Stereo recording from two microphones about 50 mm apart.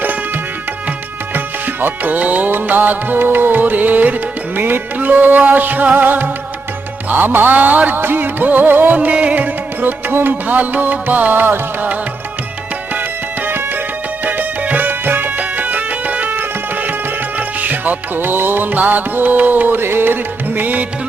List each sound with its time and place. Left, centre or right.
1.3 s music: right
12.9 s music: right